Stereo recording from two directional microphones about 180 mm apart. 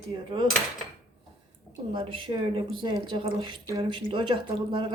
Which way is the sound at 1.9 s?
30° right (ahead or behind).